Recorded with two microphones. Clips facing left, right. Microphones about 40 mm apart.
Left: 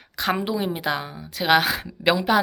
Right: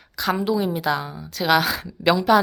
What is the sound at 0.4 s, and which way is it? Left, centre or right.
A woman's voice, left.